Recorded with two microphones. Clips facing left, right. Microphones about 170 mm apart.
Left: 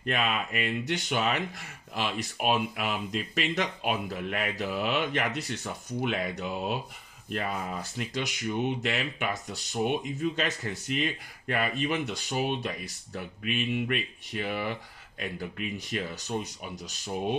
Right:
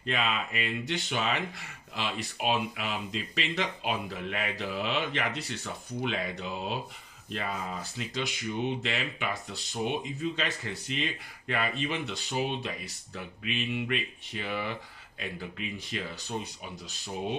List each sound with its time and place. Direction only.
0.0 s speech: 50° left (ahead or behind)
8.0 s speech: 50° left (ahead or behind)